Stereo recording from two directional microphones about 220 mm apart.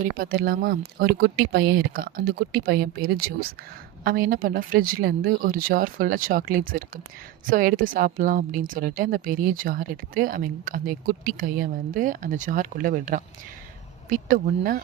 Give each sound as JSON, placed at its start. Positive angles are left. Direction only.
{"t": 0.0, "sound": "speech", "side_deg": -40}